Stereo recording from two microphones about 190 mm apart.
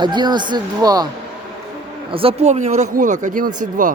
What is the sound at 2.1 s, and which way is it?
Speech, 35° right (ahead or behind).